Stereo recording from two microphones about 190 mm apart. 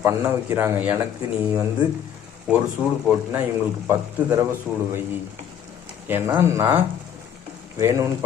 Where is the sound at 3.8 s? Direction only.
20° right (ahead or behind).